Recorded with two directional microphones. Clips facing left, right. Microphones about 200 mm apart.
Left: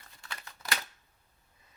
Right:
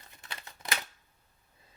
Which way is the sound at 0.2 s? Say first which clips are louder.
Even; 20° right (ahead or behind).